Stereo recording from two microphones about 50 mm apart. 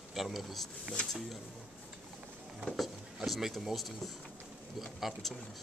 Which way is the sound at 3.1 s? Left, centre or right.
Centre.